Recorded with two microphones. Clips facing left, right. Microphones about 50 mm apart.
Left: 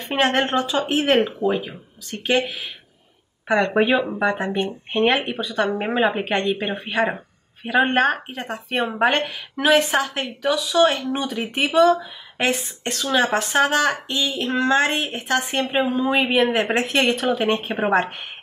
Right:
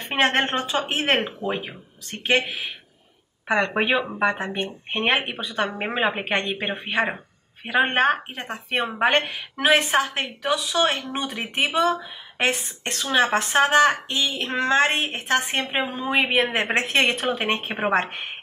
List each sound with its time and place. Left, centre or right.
0.0 s speech: right
11.7 s speech: right